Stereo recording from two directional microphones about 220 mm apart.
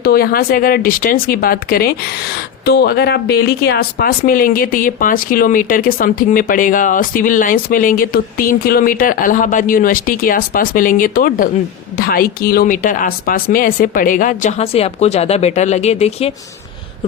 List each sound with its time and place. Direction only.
0.0 s speech: 45° left (ahead or behind)